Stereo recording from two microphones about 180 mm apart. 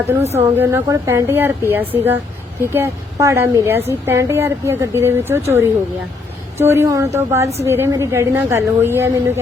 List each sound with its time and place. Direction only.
0.2 s speech: 35° right (ahead or behind)
0.5 s a woman's voice: 15° right (ahead or behind)